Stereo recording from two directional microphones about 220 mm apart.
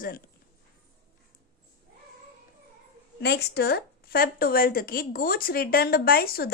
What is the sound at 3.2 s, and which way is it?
A woman's voice, 50° left (ahead or behind).